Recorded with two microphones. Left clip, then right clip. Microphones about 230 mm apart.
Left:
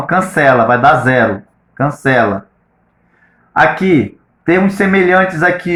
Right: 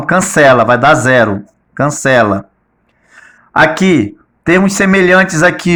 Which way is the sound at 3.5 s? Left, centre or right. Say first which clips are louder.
Right 1 dB; right.